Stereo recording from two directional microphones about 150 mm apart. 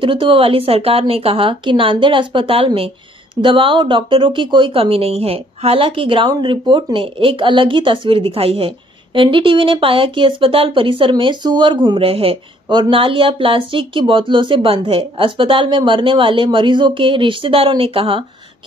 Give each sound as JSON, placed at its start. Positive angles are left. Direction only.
{"t": 0.0, "sound": "speech", "side_deg": -35}